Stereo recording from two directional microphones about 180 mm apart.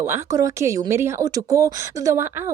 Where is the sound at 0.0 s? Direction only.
15° right (ahead or behind).